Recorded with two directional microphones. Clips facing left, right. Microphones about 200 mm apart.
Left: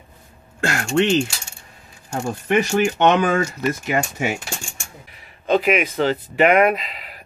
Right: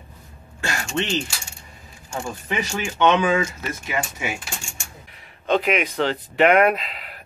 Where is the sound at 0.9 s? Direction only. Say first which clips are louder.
Left 8 dB; 50° left (ahead or behind).